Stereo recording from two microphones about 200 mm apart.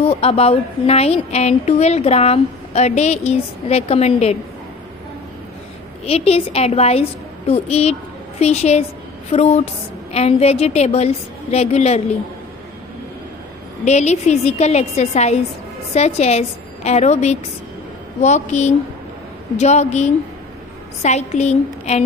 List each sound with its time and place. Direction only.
0.0 s a woman's voice: 30° left (ahead or behind)
6.0 s a woman's voice: 30° left (ahead or behind)
13.8 s a woman's voice: 35° left (ahead or behind)